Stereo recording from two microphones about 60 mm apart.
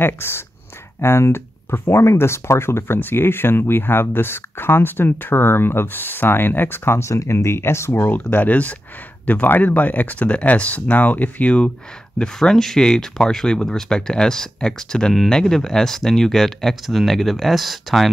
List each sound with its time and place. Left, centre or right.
0.0 s speech: left
8.0 s speech: left
12.2 s speech: centre